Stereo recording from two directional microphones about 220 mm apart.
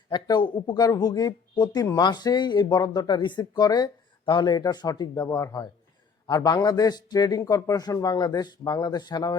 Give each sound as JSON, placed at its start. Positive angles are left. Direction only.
{"t": 0.1, "sound": "speech", "side_deg": 20}